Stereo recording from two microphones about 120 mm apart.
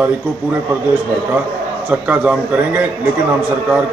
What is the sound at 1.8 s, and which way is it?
A man's voice, 10° right (ahead or behind).